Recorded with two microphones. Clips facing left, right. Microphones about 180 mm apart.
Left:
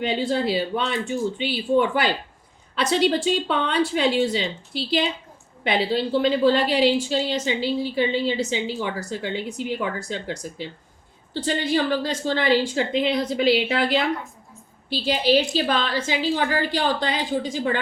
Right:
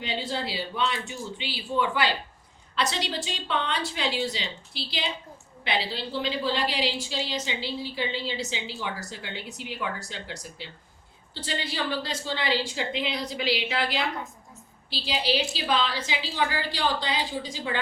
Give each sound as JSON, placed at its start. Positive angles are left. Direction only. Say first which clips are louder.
{"t": 0.0, "sound": "a woman's voice", "louder": "left 8 dB", "side_deg": 55}